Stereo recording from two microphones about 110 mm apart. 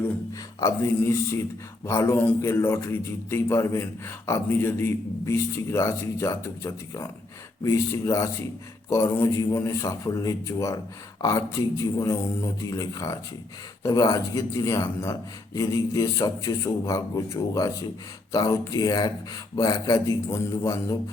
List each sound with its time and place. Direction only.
0.6 s a man's voice: 25° left (ahead or behind)
2.1 s a man's voice: 15° left (ahead or behind)
2.5 s a man's voice: 25° left (ahead or behind)